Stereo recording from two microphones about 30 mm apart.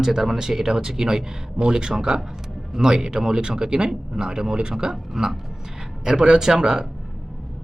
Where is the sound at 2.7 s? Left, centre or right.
Centre.